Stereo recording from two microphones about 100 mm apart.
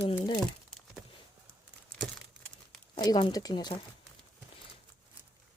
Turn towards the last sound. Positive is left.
turn(degrees=45)  # may be behind; listen again after turning